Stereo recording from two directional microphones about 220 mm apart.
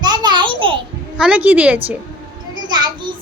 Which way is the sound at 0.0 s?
20° right (ahead or behind).